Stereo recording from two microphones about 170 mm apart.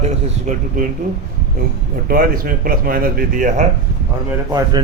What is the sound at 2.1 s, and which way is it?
Speech, 60° right (ahead or behind).